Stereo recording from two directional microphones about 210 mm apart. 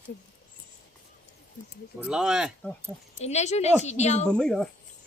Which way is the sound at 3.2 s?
30° left (ahead or behind).